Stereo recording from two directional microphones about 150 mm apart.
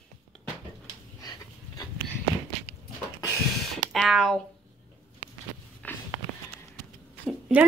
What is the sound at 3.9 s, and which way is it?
Speech, centre (ahead or behind).